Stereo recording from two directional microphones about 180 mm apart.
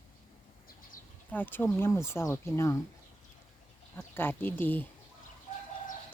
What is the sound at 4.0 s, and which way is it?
Speech, 10° left (ahead or behind).